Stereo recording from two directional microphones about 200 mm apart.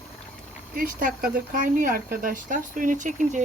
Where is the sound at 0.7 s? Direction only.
45° right (ahead or behind).